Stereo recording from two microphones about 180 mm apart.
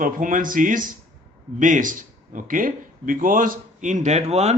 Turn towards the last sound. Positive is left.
turn(degrees=-35)  # may be behind; listen again after turning